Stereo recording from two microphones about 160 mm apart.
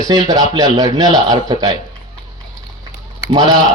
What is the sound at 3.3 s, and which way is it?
Speech, 25° right (ahead or behind).